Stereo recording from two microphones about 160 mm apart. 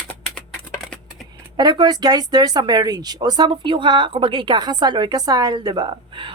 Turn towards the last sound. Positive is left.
turn(degrees=-30)  # may be behind; listen again after turning